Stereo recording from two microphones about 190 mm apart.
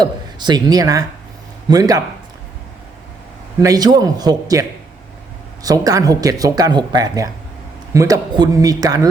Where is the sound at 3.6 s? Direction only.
20° right (ahead or behind).